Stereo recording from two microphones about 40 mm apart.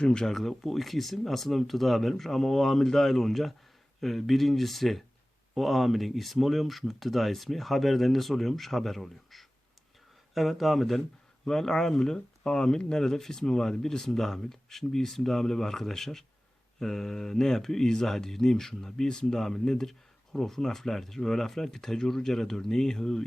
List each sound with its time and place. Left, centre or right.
0.0 s speech: left
0.3 s speech: centre